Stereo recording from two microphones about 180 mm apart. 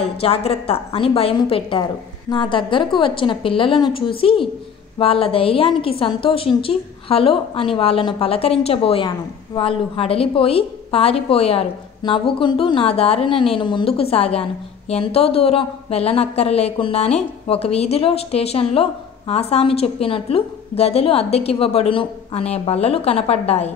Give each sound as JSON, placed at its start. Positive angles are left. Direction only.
{"t": 0.2, "sound": "a woman's voice", "side_deg": 30}